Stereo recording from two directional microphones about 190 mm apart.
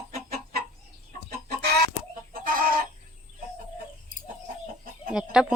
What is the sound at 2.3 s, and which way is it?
Chicken, 50° right (ahead or behind).